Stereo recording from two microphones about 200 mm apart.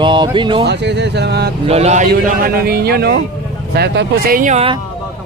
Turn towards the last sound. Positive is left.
turn(degrees=-30)  # may be behind; listen again after turning